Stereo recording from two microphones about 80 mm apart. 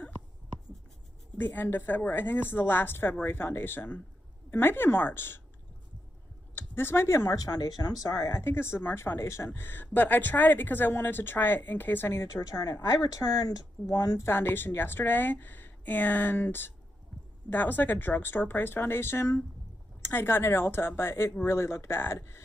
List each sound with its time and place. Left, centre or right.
1.4 s speech: left
6.5 s speech: left
7.3 s speech: left
12.2 s speech: left
14.2 s speech: left